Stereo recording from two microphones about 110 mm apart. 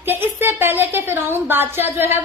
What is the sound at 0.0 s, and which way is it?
Speech, 20° right (ahead or behind).